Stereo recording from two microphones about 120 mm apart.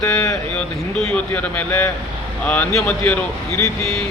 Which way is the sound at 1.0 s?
10° left (ahead or behind).